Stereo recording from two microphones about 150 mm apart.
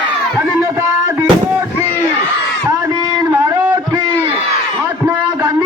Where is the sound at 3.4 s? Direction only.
25° right (ahead or behind).